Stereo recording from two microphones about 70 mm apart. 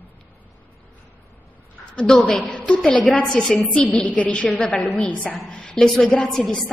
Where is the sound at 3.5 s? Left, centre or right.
Centre.